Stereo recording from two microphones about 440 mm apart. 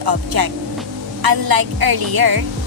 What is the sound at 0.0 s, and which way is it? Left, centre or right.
A woman's voice, right.